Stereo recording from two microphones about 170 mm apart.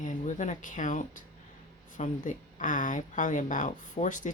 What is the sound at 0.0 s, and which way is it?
Speech, 50° left (ahead or behind).